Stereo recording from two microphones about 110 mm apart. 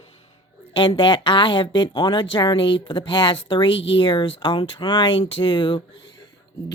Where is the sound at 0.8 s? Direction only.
45° left (ahead or behind).